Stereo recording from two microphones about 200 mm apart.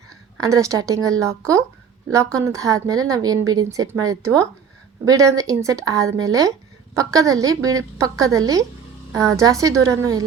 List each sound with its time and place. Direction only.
0.3 s a woman's voice: 15° right (ahead or behind)